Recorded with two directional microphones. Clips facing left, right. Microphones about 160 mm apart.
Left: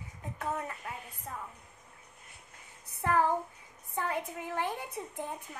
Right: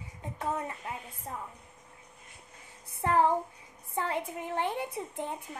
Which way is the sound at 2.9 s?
25° right (ahead or behind).